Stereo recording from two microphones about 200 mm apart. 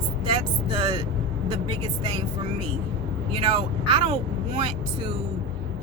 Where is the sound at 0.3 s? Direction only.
20° right (ahead or behind).